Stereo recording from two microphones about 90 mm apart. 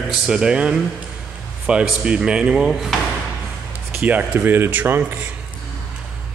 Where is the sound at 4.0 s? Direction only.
20° right (ahead or behind).